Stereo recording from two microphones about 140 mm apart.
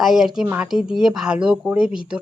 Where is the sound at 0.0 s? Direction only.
Centre (ahead or behind).